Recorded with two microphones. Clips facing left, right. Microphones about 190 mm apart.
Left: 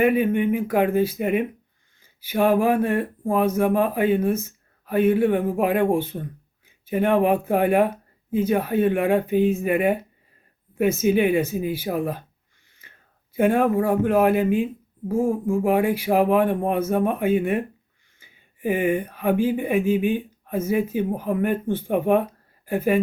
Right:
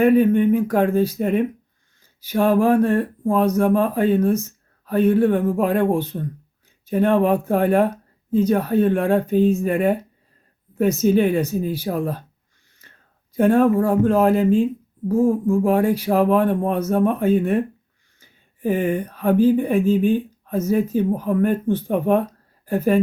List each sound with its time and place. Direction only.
0.0 s speech: 10° left (ahead or behind)
13.3 s speech: 10° left (ahead or behind)